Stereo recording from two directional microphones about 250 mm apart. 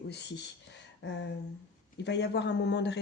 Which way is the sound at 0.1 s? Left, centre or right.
Left.